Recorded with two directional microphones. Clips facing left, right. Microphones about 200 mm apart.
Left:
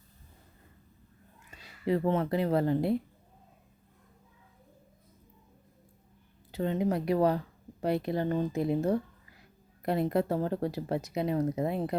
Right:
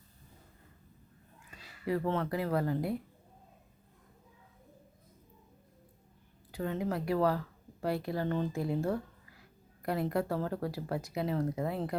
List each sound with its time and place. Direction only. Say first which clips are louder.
1.8 s speech: left 4 dB; 20° left (ahead or behind)
6.5 s speech: left 5 dB; 25° left (ahead or behind)